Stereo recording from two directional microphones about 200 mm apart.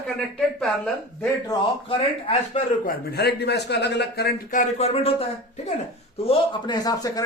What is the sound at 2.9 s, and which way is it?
A man's voice, 55° left (ahead or behind).